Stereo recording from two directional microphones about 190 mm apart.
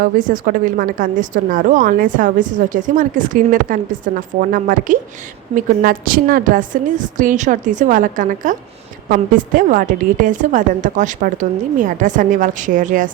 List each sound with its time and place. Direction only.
0.0 s a woman's voice: 45° right (ahead or behind)